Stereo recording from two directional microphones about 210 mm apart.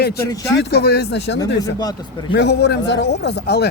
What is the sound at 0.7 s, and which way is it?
Speech, 50° left (ahead or behind).